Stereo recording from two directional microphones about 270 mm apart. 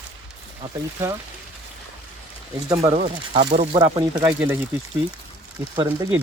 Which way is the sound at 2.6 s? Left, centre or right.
Centre.